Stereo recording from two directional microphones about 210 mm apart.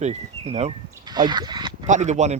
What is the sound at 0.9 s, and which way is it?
Speech, 20° right (ahead or behind).